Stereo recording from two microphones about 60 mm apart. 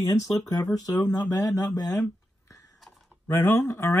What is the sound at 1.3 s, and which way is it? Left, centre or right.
Speech, left.